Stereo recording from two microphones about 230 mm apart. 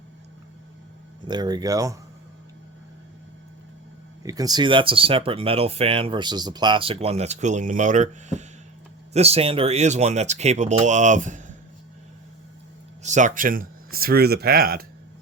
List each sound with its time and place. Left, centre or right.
1.3 s speech: centre
4.2 s speech: centre; by 11.5 s right
13.0 s speech: right